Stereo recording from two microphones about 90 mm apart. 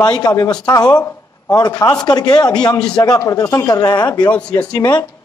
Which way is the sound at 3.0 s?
40° left (ahead or behind).